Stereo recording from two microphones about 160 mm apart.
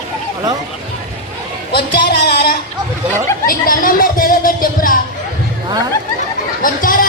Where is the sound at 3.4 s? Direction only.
60° left (ahead or behind).